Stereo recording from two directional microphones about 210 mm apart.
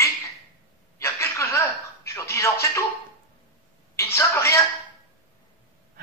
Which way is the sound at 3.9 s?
15° left (ahead or behind).